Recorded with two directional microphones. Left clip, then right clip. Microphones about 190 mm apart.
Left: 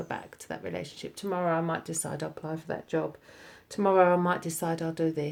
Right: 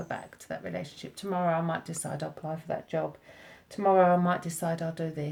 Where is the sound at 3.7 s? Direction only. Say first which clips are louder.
Even; 35° left (ahead or behind).